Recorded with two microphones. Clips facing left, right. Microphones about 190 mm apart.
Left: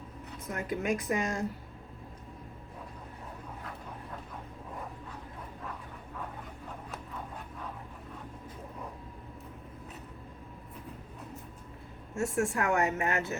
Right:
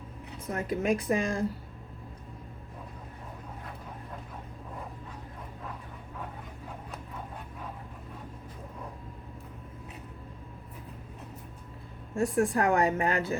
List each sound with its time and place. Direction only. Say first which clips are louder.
0.5 s speech: right 3 dB; 30° right (ahead or behind)
12.1 s speech: right 4 dB; 35° right (ahead or behind)